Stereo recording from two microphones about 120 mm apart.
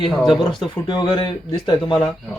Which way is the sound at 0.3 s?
40° left (ahead or behind).